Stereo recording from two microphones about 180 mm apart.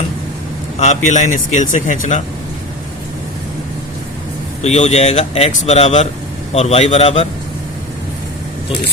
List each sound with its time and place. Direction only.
0.8 s speech: 40° left (ahead or behind)
4.6 s speech: 40° left (ahead or behind)